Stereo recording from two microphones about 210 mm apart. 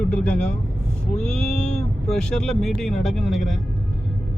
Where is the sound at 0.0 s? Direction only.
5° left (ahead or behind).